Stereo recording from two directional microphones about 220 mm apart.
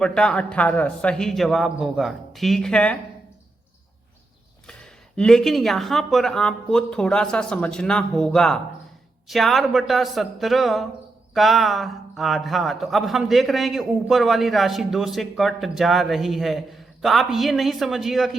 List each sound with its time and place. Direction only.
0.0 s speech: 5° left (ahead or behind)
4.6 s speech: 5° left (ahead or behind)